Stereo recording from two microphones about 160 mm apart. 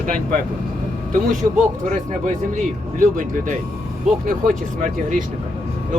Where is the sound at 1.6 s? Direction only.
50° right (ahead or behind).